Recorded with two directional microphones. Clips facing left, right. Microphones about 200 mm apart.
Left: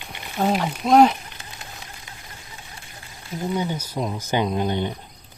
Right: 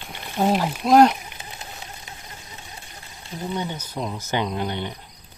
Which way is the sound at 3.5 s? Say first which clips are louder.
Left 3 dB; 10° left (ahead or behind).